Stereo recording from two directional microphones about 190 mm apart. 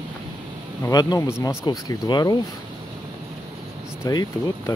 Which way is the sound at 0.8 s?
20° left (ahead or behind).